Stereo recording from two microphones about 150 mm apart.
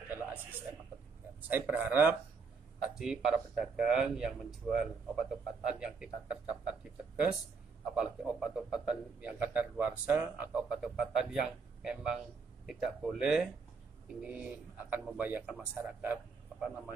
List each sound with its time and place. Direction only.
1.5 s a man's voice: 15° right (ahead or behind)